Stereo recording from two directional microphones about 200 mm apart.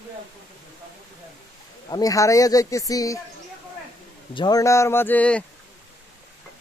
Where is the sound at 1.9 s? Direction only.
20° left (ahead or behind).